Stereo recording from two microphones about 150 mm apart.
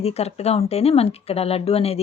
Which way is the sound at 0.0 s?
45° left (ahead or behind).